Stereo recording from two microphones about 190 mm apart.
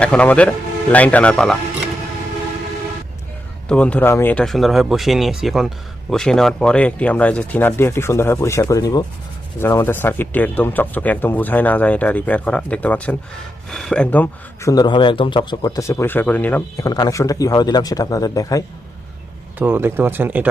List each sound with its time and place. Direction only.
0.0 s speech: 5° left (ahead or behind)
3.7 s speech: 5° left (ahead or behind)
19.5 s speech: 10° right (ahead or behind)